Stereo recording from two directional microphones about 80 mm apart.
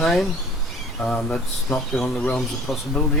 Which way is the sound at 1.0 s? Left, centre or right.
Centre.